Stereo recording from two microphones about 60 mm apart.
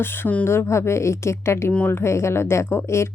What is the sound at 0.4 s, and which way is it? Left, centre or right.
A woman's voice, left.